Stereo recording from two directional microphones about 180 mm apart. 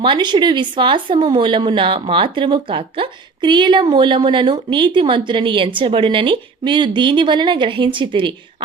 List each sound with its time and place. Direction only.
0.0 s a woman's voice: 25° right (ahead or behind)